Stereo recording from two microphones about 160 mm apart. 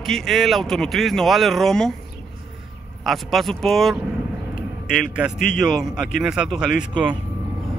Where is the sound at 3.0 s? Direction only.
Centre (ahead or behind).